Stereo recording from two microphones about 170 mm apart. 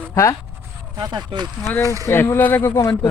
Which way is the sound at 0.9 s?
25° right (ahead or behind).